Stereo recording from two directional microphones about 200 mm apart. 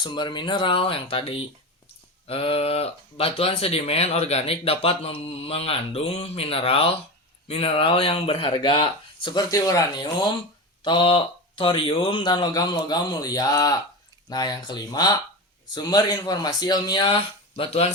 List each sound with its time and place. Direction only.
0.0 s speech: 25° left (ahead or behind)